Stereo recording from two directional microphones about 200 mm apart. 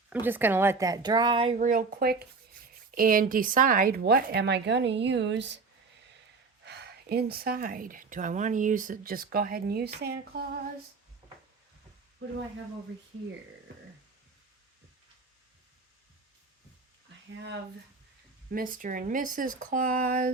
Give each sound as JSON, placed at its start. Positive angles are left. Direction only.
{"t": 0.1, "sound": "speech", "side_deg": -10}
{"t": 6.7, "sound": "speech", "side_deg": -55}
{"t": 18.5, "sound": "speech", "side_deg": -45}